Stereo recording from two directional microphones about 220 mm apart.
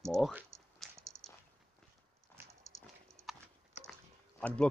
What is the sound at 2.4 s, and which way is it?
Dog, 10° right (ahead or behind).